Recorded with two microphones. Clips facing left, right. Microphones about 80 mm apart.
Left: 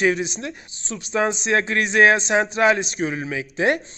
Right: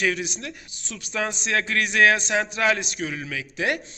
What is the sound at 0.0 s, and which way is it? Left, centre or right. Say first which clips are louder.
A man's voice: left 5 dB; left.